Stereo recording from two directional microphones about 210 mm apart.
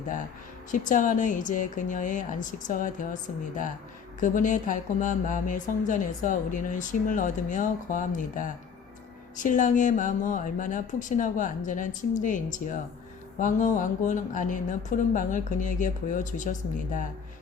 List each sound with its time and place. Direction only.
0.7 s speech: 40° left (ahead or behind)